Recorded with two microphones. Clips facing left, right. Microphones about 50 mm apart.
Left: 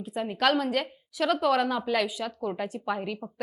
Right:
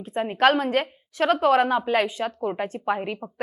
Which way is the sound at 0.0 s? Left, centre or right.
Right.